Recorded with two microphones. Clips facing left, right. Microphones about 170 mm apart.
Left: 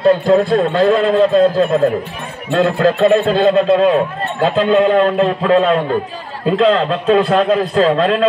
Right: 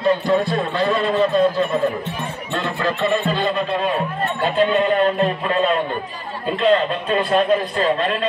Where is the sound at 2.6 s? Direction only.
65° left (ahead or behind).